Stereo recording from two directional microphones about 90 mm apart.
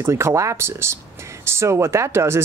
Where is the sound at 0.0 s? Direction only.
30° right (ahead or behind).